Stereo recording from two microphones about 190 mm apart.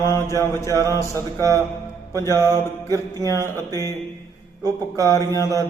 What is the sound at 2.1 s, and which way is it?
Music, 15° left (ahead or behind).